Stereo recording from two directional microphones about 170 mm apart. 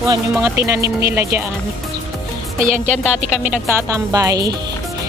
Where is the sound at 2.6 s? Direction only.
45° right (ahead or behind).